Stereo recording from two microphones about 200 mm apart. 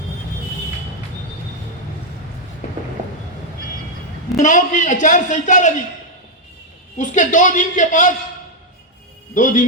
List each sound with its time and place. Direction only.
4.4 s a man's voice: 40° left (ahead or behind)
6.9 s a man's voice: 40° left (ahead or behind)
9.3 s a man's voice: 40° left (ahead or behind)